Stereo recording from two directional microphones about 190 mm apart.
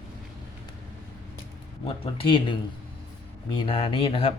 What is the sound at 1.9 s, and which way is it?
Speech, 30° left (ahead or behind).